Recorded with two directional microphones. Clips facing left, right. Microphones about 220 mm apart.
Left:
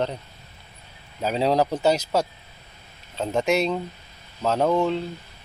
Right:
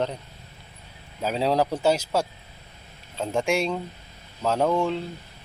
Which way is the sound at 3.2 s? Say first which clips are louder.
Left 2 dB; 10° right (ahead or behind).